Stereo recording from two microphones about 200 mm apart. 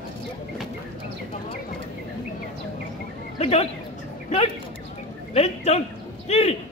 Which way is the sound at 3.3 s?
30° left (ahead or behind).